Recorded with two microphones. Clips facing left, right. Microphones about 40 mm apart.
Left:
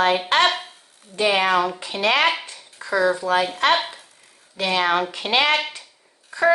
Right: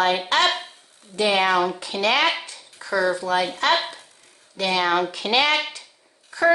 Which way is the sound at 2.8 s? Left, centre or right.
Left.